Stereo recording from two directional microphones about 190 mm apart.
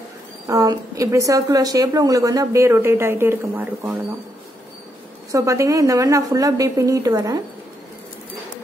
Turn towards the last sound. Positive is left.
turn(degrees=-20)  # may be behind; listen again after turning